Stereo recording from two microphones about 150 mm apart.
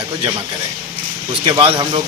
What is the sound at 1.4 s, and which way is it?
Speech, 30° right (ahead or behind).